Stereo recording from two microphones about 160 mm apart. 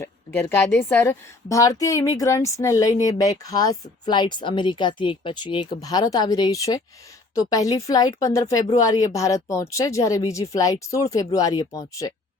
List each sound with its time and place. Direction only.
0.0 s speech: 15° left (ahead or behind)